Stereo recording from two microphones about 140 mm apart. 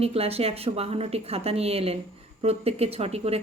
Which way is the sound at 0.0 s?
45° right (ahead or behind).